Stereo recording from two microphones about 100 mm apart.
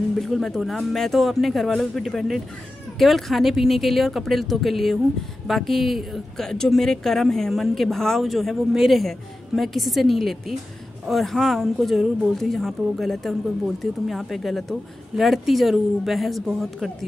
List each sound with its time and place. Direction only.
0.2 s a woman's voice: centre (ahead or behind)